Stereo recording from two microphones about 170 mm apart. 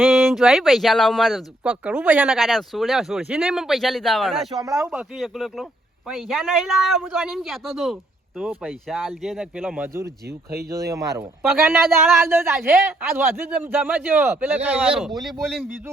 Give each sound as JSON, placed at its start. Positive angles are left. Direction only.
{"t": 0.0, "sound": "speech", "side_deg": 0}
{"t": 10.2, "sound": "speech", "side_deg": -70}
{"t": 10.7, "sound": "a man's voice", "side_deg": -20}